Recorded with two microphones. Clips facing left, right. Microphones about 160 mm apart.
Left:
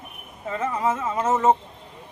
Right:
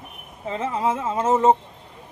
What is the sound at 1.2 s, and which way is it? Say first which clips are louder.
Speech: right 2 dB; 15° right (ahead or behind).